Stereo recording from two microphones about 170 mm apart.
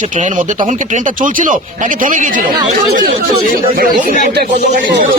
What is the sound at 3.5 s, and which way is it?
Speech, 55° right (ahead or behind).